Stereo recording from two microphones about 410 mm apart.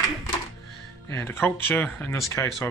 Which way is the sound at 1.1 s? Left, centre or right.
Centre.